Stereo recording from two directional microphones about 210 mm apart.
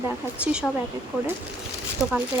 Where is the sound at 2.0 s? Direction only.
Centre (ahead or behind).